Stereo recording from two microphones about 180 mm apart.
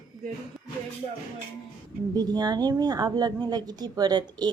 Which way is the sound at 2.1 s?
20° right (ahead or behind).